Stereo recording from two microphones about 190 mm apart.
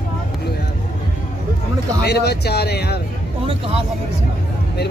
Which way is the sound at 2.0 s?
60° left (ahead or behind).